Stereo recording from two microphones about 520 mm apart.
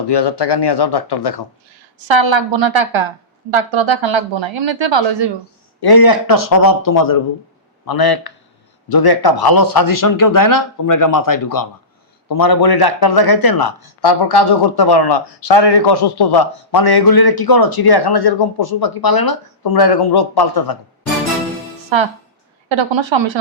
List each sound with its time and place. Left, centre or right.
0.1 s speech: left
2.0 s a woman's voice: right
5.8 s a man's voice: left
21.9 s a woman's voice: right